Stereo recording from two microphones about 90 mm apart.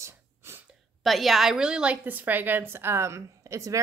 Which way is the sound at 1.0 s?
Centre (ahead or behind).